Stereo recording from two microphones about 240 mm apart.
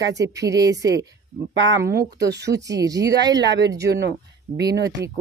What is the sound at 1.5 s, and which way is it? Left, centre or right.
Speech, right.